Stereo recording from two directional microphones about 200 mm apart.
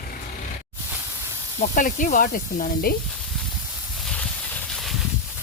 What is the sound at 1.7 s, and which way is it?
Speech, 40° left (ahead or behind).